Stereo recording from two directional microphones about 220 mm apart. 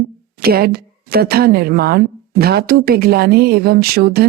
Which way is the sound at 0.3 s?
45° right (ahead or behind).